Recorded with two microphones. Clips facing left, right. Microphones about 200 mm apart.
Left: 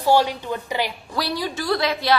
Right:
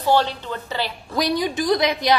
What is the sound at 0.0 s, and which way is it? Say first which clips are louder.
Speech: left 1 dB; 10° left (ahead or behind).